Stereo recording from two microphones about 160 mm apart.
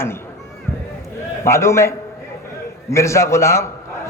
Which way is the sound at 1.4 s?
15° left (ahead or behind).